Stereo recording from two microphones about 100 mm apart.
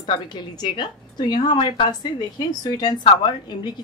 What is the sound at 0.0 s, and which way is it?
A woman's voice, 50° left (ahead or behind).